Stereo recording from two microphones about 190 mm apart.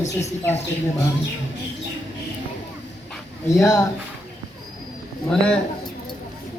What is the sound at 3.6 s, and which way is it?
Speech, 20° left (ahead or behind).